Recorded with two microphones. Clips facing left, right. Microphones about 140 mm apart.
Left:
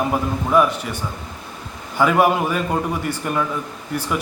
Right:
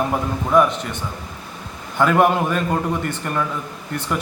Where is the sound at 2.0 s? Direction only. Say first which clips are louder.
Even; 5° left (ahead or behind).